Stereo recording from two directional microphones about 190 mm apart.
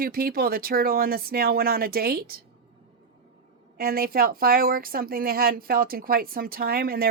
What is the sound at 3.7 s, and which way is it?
Speech, 50° right (ahead or behind).